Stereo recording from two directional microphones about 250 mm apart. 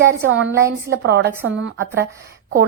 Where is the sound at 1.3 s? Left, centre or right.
Centre.